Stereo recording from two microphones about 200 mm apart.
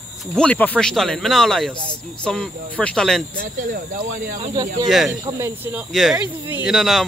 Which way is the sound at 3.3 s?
45° right (ahead or behind).